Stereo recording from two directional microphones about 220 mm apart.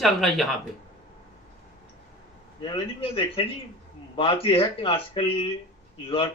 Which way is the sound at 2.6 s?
20° left (ahead or behind).